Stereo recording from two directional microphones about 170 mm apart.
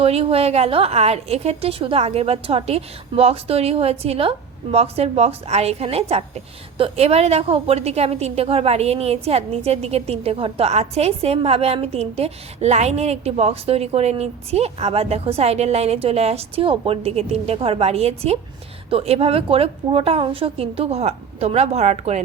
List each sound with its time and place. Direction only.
0.0 s a woman's voice: 35° right (ahead or behind)